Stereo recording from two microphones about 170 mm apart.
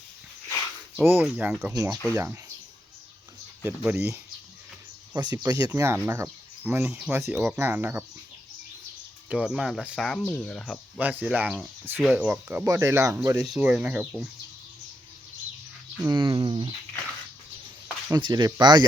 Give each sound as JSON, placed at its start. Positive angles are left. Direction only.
{"t": 0.9, "sound": "speech", "side_deg": -10}
{"t": 1.7, "sound": "speech", "side_deg": -20}
{"t": 3.6, "sound": "speech", "side_deg": -10}
{"t": 7.3, "sound": "speech", "side_deg": 0}
{"t": 7.5, "sound": "speech", "side_deg": -15}
{"t": 9.3, "sound": "speech", "side_deg": -5}
{"t": 11.0, "sound": "speech", "side_deg": -10}
{"t": 13.4, "sound": "speech", "side_deg": -5}
{"t": 14.0, "sound": "speech", "side_deg": 5}
{"t": 16.0, "sound": "speech", "side_deg": -25}
{"t": 18.1, "sound": "speech", "side_deg": -25}